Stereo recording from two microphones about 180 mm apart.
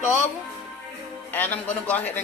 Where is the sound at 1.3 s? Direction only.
10° left (ahead or behind).